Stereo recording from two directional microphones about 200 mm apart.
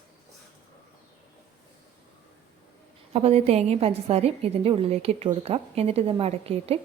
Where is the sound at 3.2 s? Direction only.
30° right (ahead or behind).